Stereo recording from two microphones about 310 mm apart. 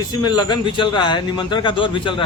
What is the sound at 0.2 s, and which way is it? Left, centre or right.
A man's voice, centre.